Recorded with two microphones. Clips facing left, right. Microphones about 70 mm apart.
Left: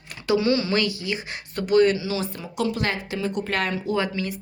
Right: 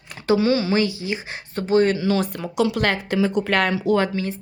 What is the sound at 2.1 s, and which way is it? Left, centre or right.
Speech, right.